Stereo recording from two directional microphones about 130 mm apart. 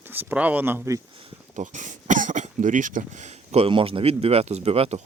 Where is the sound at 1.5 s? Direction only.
70° right (ahead or behind).